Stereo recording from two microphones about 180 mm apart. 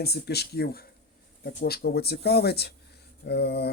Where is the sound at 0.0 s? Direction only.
60° left (ahead or behind).